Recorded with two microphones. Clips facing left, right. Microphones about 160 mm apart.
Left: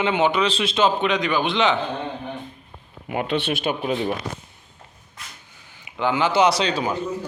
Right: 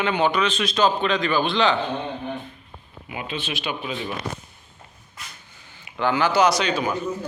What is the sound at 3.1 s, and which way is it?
Speech, 60° left (ahead or behind).